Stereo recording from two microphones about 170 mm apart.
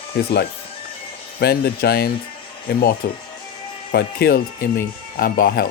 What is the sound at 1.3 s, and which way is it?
Speech, 70° left (ahead or behind).